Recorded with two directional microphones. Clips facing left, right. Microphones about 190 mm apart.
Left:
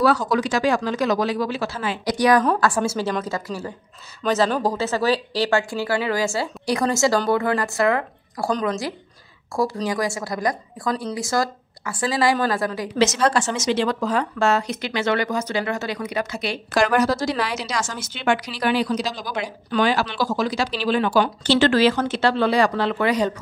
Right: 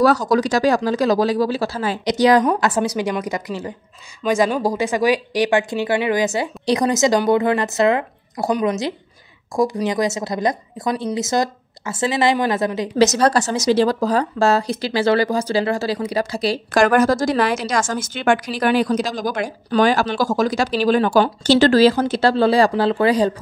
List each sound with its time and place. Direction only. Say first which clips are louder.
0.0 s speech: right 4 dB; 40° right (ahead or behind)
2.0 s a woman's voice: right 3 dB; 25° right (ahead or behind)
12.9 s speech: right 4 dB; 40° right (ahead or behind)
16.7 s a woman's voice: right 4 dB; 50° right (ahead or behind); by 23.3 s 30° right (ahead or behind)